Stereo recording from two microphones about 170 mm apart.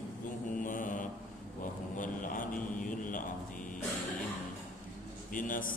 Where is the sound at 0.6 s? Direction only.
50° left (ahead or behind).